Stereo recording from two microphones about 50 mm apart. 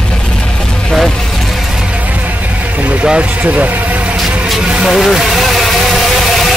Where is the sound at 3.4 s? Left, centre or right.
Right.